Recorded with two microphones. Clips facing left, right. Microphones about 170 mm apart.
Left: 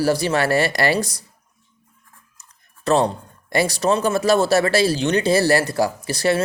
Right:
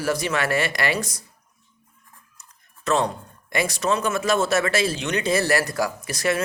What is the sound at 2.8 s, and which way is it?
Speech, 35° left (ahead or behind).